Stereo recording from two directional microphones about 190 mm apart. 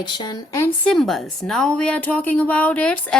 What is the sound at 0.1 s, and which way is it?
Speech, 20° left (ahead or behind).